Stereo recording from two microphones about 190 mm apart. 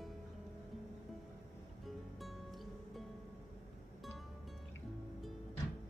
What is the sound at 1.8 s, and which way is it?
Music, centre (ahead or behind).